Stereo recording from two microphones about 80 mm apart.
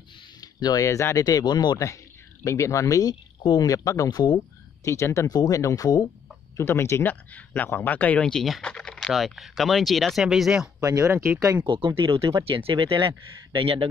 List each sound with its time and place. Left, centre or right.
0.4 s speech: left
1.2 s speech: left
2.4 s speech: left
6.5 s speech: left
8.3 s speech: centre
10.8 s speech: right
11.6 s speech: right